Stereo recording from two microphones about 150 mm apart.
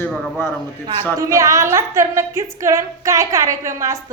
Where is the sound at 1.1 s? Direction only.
20° right (ahead or behind).